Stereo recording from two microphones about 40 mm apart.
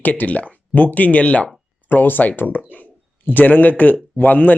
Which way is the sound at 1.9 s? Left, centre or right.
Left.